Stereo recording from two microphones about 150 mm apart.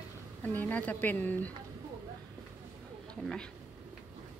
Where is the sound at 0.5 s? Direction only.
10° left (ahead or behind).